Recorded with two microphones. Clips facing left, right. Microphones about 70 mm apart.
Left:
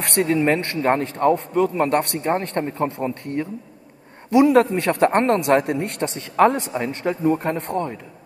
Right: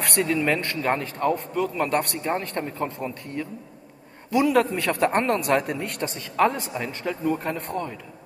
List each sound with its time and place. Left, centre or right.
0.2 s a man's voice: left